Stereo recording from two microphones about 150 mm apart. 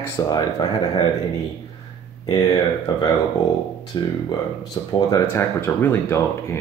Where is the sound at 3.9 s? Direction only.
30° left (ahead or behind).